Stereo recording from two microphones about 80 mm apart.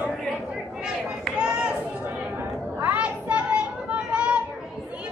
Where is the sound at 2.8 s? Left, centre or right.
Centre.